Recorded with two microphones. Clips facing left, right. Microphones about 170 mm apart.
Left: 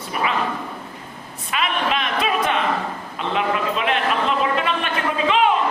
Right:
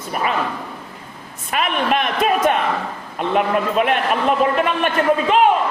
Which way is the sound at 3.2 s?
50° right (ahead or behind).